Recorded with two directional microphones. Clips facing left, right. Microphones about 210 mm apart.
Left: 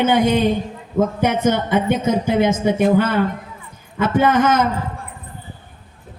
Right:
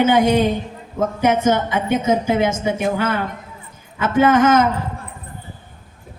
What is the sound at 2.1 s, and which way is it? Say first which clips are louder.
Speech: right 2 dB; 50° right (ahead or behind).